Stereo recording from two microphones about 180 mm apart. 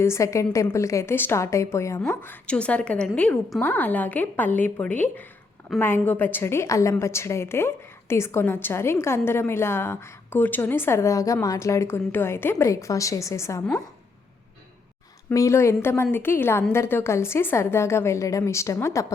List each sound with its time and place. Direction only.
0.0 s a woman's voice: 15° left (ahead or behind)
15.3 s a woman's voice: 15° left (ahead or behind)